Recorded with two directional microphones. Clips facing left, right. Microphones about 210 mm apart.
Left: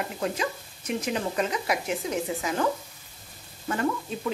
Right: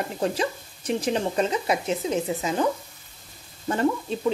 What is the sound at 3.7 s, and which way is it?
Speech, 30° right (ahead or behind).